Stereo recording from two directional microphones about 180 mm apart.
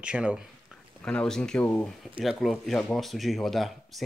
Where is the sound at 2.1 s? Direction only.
Centre (ahead or behind).